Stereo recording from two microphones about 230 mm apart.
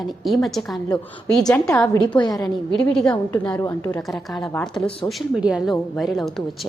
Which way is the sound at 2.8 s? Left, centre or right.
Centre.